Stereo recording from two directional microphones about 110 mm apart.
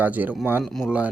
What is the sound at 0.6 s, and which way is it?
Speech, centre (ahead or behind).